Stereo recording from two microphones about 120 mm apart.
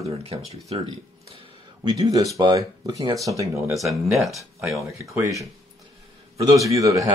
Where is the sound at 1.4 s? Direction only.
35° right (ahead or behind).